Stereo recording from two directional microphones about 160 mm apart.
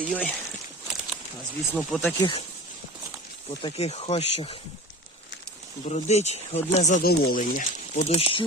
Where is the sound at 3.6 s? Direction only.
40° left (ahead or behind).